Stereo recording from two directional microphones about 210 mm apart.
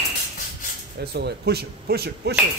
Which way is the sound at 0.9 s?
50° right (ahead or behind).